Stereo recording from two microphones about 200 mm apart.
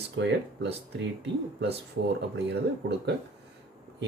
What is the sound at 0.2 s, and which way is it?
Speech, 60° right (ahead or behind).